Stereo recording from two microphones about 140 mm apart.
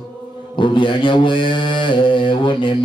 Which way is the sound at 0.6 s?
35° left (ahead or behind).